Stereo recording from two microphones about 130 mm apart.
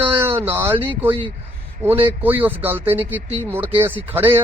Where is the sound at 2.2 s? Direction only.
15° right (ahead or behind).